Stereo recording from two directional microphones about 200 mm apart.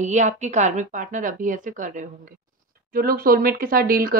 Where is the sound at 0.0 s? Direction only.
35° right (ahead or behind).